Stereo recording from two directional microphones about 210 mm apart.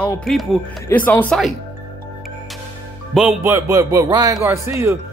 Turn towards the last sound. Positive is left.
turn(degrees=-10)  # may be behind; listen again after turning